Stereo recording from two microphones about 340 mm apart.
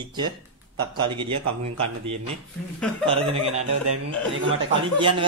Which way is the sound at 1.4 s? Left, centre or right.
Right.